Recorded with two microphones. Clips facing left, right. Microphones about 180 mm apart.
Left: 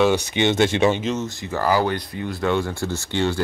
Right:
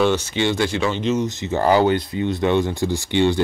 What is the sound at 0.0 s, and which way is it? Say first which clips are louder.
Speech: even; 15° left (ahead or behind).